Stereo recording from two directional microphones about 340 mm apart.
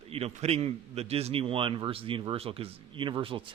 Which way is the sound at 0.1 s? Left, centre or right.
Centre.